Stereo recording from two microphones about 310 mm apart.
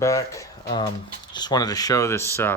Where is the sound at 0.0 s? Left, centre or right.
Centre.